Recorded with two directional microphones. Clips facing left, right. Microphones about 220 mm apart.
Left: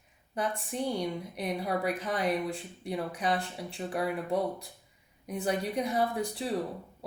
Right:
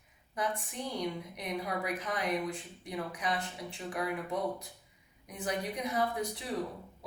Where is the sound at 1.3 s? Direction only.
30° left (ahead or behind).